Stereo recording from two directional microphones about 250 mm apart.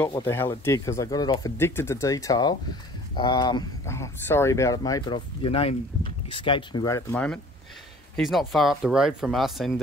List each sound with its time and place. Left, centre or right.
0.1 s speech: centre